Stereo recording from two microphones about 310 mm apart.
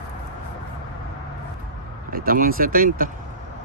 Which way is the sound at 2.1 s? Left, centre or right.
Right.